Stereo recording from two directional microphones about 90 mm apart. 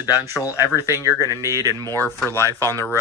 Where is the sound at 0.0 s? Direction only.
40° left (ahead or behind).